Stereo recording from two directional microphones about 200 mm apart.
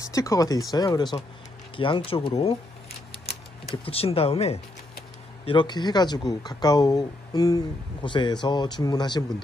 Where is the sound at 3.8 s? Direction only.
30° left (ahead or behind).